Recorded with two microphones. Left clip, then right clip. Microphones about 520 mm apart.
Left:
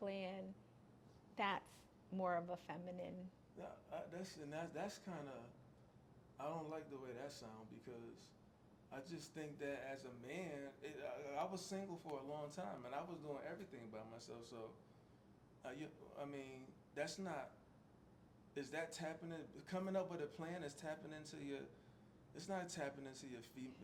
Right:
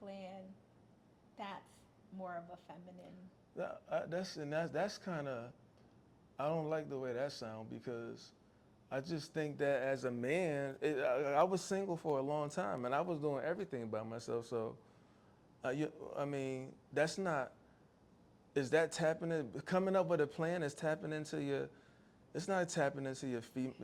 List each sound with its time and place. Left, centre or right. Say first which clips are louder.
0.0 s a sound: left 3 dB; left
1.4 s a woman's voice: left 5 dB; left
3.6 s speech: right 11 dB; right
18.5 s speech: right 14 dB; right